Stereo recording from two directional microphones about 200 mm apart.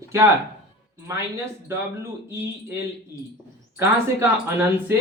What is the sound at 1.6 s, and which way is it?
Speech, 10° right (ahead or behind).